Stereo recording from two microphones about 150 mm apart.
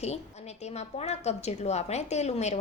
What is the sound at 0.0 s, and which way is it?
A woman's voice, 45° left (ahead or behind).